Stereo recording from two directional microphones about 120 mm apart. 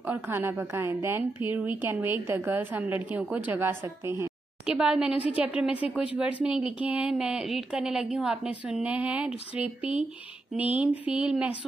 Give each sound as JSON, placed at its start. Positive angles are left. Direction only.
{"t": 0.0, "sound": "a woman's voice", "side_deg": -15}
{"t": 4.6, "sound": "speech", "side_deg": -5}